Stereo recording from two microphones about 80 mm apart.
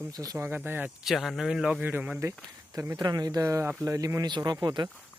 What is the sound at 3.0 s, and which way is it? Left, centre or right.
Speech, right.